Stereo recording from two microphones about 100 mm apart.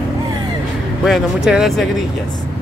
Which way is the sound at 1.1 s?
5° right (ahead or behind).